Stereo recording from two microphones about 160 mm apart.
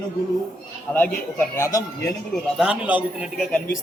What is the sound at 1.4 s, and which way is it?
Speech, 20° left (ahead or behind).